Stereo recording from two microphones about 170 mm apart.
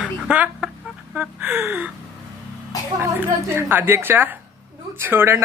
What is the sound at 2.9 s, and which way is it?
A woman's voice, 15° right (ahead or behind).